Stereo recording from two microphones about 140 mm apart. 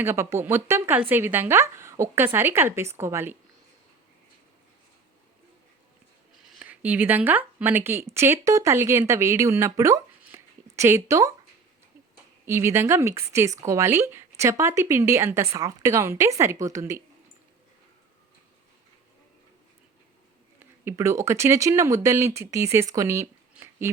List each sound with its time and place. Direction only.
0.0 s speech: 20° right (ahead or behind)
6.6 s a woman's voice: 10° right (ahead or behind)
10.2 s a sound: 15° right (ahead or behind)
12.5 s a woman's voice: 20° right (ahead or behind)
20.6 s speech: 15° right (ahead or behind)